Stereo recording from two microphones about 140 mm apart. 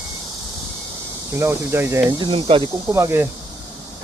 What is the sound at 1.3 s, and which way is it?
Speech, 20° right (ahead or behind).